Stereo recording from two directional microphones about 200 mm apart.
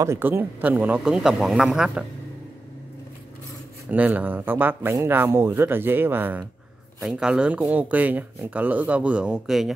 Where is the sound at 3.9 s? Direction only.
10° right (ahead or behind).